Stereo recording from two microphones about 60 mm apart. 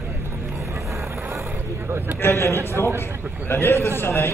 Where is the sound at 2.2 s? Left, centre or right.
Left.